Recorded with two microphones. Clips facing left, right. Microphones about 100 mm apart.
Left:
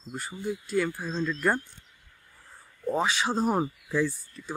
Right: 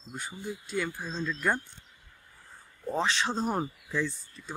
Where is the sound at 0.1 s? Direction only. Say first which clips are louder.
Left 5 dB; centre (ahead or behind).